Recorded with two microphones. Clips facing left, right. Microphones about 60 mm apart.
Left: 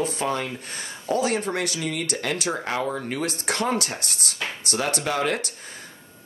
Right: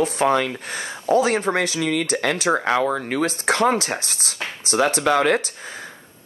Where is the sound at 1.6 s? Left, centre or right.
Right.